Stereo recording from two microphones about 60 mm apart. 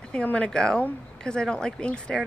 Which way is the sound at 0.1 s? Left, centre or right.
Left.